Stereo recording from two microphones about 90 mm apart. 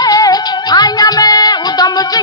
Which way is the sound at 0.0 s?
45° left (ahead or behind).